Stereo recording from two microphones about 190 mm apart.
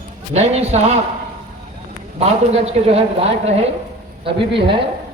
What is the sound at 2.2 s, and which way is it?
A man's voice, 35° right (ahead or behind).